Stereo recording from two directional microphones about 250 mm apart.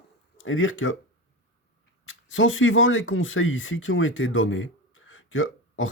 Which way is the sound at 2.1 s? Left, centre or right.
Left.